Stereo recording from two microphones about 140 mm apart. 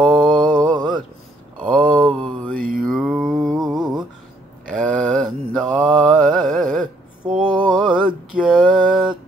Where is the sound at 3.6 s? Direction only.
30° right (ahead or behind).